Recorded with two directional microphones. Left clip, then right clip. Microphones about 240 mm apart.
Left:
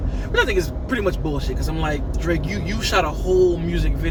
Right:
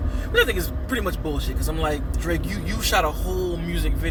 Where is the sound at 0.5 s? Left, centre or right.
Centre.